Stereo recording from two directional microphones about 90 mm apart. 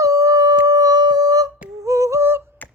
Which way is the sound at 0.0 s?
40° right (ahead or behind).